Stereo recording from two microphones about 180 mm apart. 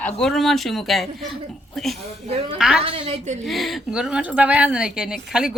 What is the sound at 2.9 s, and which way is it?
Speech, 35° right (ahead or behind).